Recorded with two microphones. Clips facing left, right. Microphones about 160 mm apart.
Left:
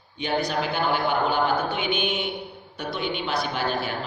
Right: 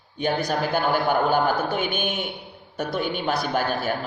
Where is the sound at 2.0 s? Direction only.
Centre (ahead or behind).